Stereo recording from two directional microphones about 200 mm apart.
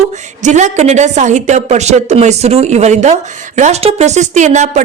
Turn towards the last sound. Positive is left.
turn(degrees=-35)  # may be behind; listen again after turning